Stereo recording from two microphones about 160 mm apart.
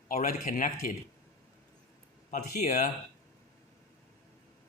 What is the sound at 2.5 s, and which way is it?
Speech, 60° left (ahead or behind).